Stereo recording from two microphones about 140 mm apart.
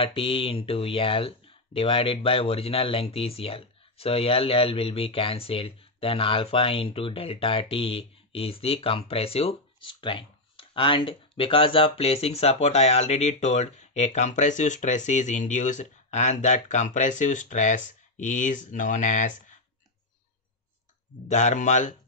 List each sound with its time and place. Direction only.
0.0 s speech: 40° left (ahead or behind); by 19.3 s 60° left (ahead or behind)
21.3 s speech: 60° left (ahead or behind)